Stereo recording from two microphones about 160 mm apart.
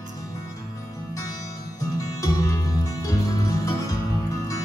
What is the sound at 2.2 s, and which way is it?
Music, 20° left (ahead or behind).